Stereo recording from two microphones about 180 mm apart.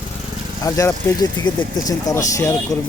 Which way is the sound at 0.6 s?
15° left (ahead or behind).